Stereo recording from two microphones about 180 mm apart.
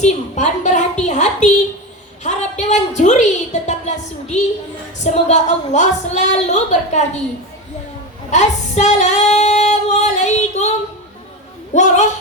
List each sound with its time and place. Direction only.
0.0 s a woman's voice: 40° left (ahead or behind)
1.0 s a sound: 40° left (ahead or behind)
2.2 s a woman's voice: 40° left (ahead or behind)
8.3 s female singing: 40° left (ahead or behind)
11.7 s a woman's voice: 40° left (ahead or behind)